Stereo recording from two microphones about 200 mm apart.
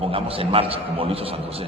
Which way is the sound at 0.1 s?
30° right (ahead or behind).